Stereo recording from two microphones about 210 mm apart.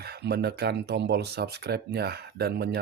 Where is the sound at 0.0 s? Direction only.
50° right (ahead or behind).